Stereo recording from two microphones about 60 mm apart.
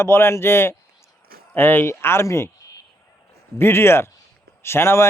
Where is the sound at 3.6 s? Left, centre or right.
Left.